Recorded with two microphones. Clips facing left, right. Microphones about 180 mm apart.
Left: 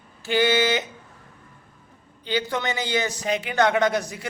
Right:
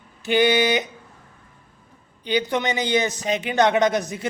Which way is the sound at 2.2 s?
20° right (ahead or behind).